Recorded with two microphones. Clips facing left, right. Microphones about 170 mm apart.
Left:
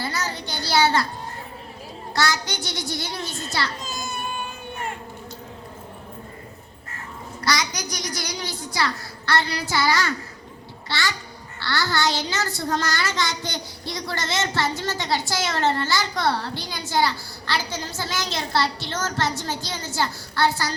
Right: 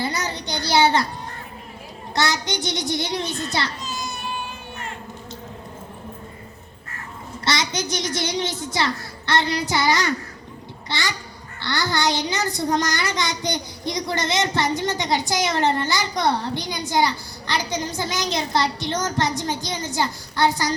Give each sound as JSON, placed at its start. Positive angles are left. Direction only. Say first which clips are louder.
{"t": 0.0, "sound": "child singing", "louder": "right 2 dB", "side_deg": -20}
{"t": 2.1, "sound": "a child's voice", "louder": "right 2 dB", "side_deg": -20}
{"t": 3.8, "sound": "baby cry", "louder": "right 1 dB", "side_deg": 50}
{"t": 7.4, "sound": "a child's voice", "louder": "right 1 dB", "side_deg": -25}